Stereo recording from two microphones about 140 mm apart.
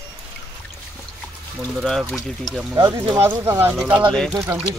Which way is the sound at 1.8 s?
Centre (ahead or behind).